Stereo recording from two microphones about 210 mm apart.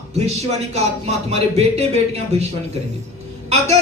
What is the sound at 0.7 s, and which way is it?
A woman's voice, 30° right (ahead or behind).